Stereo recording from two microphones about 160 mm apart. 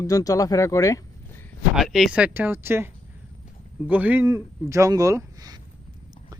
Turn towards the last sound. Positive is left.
turn(degrees=-20)  # may be behind; listen again after turning